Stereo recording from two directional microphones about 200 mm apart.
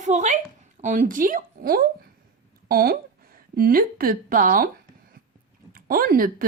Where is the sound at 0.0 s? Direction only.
35° right (ahead or behind).